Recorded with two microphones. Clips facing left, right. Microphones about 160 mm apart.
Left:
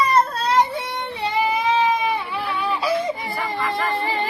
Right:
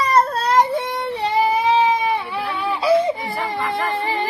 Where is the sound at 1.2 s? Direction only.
35° right (ahead or behind).